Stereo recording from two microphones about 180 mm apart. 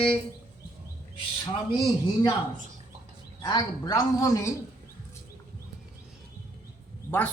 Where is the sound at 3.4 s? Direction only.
20° left (ahead or behind).